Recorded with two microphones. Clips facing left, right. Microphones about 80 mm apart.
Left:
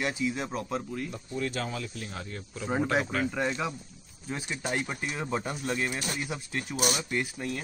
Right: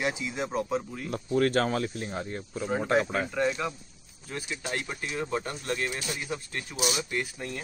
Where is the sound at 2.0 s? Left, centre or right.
Right.